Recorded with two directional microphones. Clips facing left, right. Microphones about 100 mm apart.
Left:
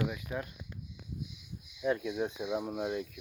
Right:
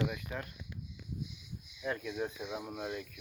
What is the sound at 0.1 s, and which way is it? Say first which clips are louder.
Speech: left 3 dB; 10° left (ahead or behind).